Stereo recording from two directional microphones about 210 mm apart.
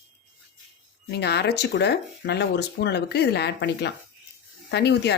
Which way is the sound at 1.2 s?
55° left (ahead or behind).